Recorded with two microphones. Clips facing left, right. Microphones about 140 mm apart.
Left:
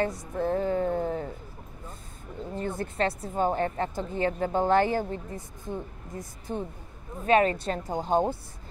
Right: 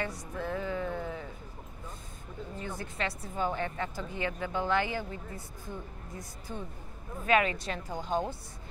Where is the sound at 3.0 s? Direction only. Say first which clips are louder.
Left 6 dB; 40° left (ahead or behind).